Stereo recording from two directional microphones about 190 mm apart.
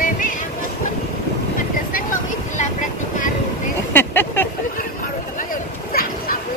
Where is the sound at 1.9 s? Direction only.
40° left (ahead or behind).